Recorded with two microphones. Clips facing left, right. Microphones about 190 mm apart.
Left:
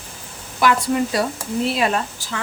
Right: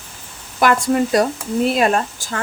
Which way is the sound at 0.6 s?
50° right (ahead or behind).